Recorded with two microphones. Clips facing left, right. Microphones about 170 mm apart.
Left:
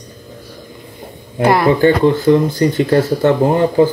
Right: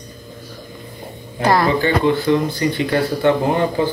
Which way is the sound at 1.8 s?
45° left (ahead or behind).